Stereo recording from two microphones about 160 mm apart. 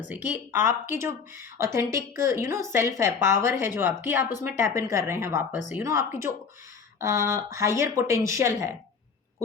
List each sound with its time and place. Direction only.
0.1 s speech: 10° right (ahead or behind)